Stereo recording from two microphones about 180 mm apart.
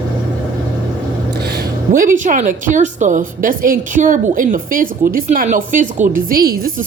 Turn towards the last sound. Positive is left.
turn(degrees=-55)  # may be behind; listen again after turning